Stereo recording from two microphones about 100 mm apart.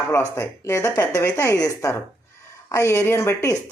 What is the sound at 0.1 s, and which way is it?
Speech, 30° left (ahead or behind).